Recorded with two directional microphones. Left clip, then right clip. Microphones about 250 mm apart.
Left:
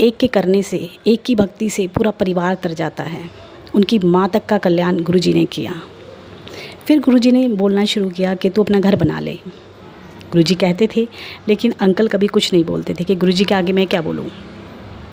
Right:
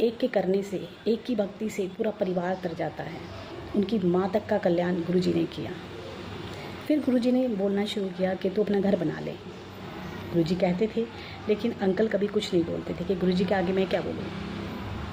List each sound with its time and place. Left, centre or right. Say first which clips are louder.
0.0 s a woman's voice: left 11 dB; left
6.8 s a woman's voice: left 12 dB; left
10.4 s a woman's voice: left 11 dB; left